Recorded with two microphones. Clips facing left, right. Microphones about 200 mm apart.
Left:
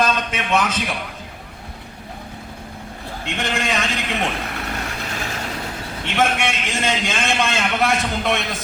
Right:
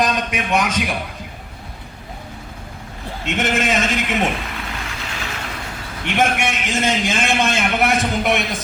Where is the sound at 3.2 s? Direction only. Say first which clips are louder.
Right 4 dB; 20° right (ahead or behind).